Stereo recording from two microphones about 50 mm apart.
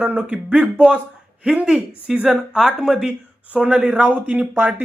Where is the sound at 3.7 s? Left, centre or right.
Right.